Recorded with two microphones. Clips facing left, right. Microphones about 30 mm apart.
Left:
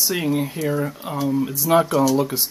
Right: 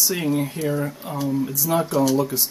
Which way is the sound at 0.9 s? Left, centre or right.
Centre.